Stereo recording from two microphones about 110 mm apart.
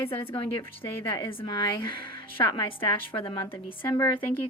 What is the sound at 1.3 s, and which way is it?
Speech, 45° left (ahead or behind).